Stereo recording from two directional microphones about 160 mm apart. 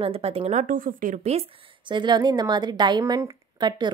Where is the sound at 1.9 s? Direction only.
30° right (ahead or behind).